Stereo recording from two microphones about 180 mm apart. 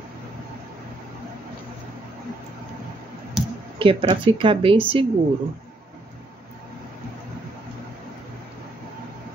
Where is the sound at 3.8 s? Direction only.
30° right (ahead or behind).